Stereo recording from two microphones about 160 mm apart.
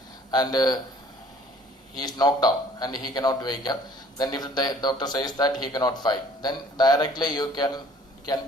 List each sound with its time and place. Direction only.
0.3 s speech: 25° left (ahead or behind)
2.0 s speech: 25° left (ahead or behind)